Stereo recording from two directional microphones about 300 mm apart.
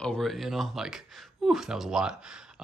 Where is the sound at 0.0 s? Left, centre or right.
Centre.